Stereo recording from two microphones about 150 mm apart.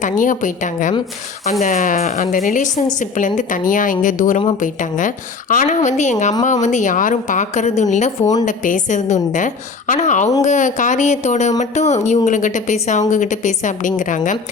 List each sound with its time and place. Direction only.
0.0 s speech: 60° left (ahead or behind)